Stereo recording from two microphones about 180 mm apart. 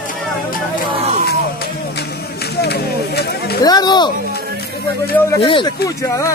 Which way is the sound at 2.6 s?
65° left (ahead or behind).